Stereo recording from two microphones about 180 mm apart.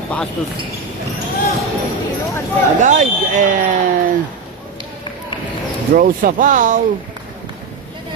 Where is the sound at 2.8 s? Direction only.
45° right (ahead or behind).